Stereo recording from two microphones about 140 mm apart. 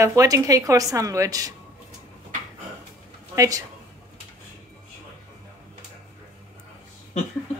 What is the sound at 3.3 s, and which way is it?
Speech, 25° right (ahead or behind).